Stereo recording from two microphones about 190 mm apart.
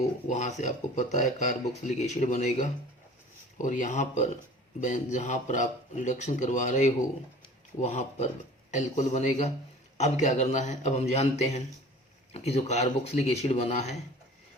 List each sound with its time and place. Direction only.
0.3 s speech: 40° left (ahead or behind)